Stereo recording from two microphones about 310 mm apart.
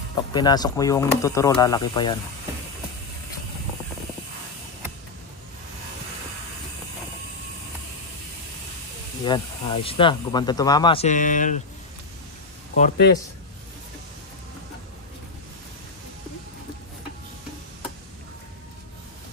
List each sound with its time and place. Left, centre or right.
0.3 s speech: centre
9.2 s speech: centre
12.7 s speech: left